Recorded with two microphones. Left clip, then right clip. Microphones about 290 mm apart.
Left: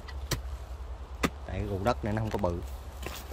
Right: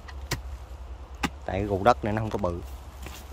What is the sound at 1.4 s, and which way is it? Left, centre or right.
Speech, centre.